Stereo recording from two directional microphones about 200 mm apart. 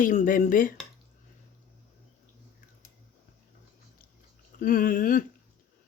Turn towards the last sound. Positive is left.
turn(degrees=40)  # may be behind; listen again after turning